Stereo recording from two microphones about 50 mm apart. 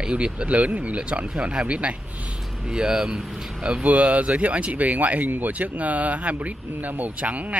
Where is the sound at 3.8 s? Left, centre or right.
Right.